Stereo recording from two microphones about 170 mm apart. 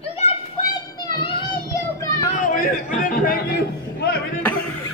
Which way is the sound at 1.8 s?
20° left (ahead or behind).